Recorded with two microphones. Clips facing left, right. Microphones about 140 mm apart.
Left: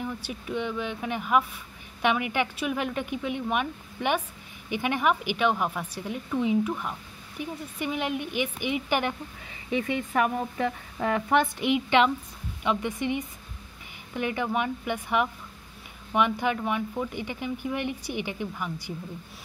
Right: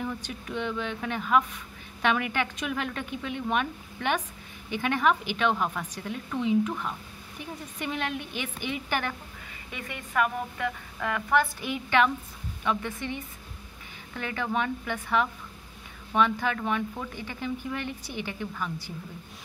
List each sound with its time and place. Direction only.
0.0 s speech: 10° left (ahead or behind)
8.1 s speech: 55° left (ahead or behind)
8.4 s speech: 15° left (ahead or behind)
10.1 s a woman's voice: 40° left (ahead or behind)
11.3 s a woman's voice: 20° left (ahead or behind)